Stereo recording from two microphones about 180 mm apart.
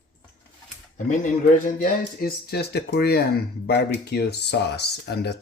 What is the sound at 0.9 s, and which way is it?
Speech, 45° left (ahead or behind).